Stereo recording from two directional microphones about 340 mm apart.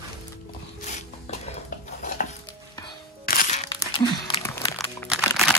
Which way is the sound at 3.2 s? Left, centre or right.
Left.